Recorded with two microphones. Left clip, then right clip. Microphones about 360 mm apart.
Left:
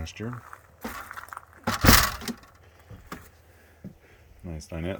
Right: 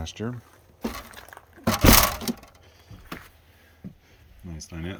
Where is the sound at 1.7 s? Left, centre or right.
Right.